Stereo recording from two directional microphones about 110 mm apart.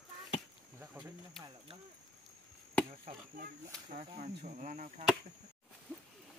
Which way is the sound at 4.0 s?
80° right.